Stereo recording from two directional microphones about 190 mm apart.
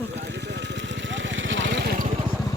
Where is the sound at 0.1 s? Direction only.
65° right (ahead or behind).